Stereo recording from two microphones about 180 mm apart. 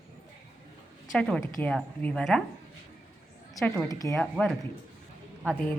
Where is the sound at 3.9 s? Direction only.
20° left (ahead or behind).